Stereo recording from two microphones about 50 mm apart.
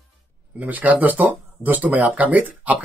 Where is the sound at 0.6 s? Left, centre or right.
Right.